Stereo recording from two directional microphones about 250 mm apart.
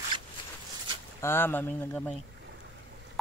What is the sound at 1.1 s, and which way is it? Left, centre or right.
Speech, centre.